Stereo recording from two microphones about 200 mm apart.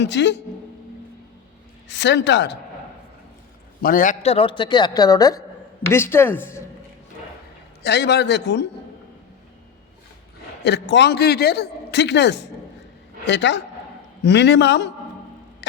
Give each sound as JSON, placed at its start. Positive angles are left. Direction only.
{"t": 0.0, "sound": "a man's voice", "side_deg": 60}
{"t": 1.9, "sound": "a man's voice", "side_deg": 60}
{"t": 3.8, "sound": "speech", "side_deg": 40}
{"t": 7.8, "sound": "a man's voice", "side_deg": 55}
{"t": 10.6, "sound": "a man's voice", "side_deg": 60}